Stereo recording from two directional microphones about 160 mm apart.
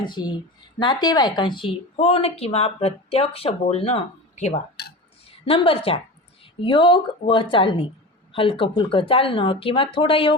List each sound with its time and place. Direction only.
0.1 s speech: 25° left (ahead or behind)